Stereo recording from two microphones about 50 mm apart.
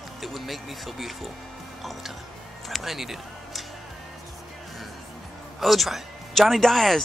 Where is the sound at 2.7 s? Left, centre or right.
Centre.